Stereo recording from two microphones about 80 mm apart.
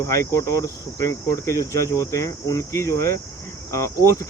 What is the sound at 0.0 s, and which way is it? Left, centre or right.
Cricket, left.